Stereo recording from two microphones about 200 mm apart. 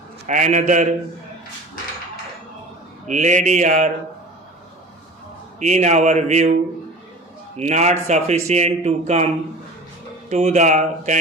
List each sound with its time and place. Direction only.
0.3 s speech: 40° right (ahead or behind)
3.1 s speech: 35° right (ahead or behind)
5.5 s speech: 35° right (ahead or behind)
10.2 s speech: 30° right (ahead or behind)